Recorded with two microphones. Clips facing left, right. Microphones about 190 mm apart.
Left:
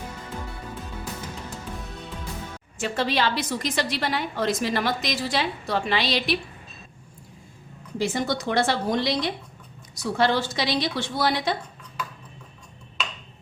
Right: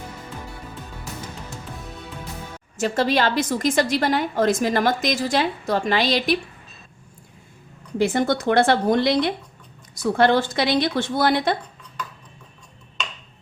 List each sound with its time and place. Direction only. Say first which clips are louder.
2.7 s a woman's voice: right 5 dB; 40° right (ahead or behind)
7.9 s a woman's voice: right 5 dB; 55° right (ahead or behind)